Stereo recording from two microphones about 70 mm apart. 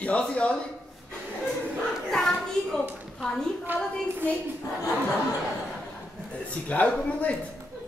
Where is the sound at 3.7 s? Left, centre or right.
Right.